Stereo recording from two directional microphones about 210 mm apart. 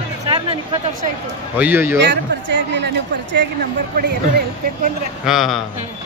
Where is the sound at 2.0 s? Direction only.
55° right (ahead or behind).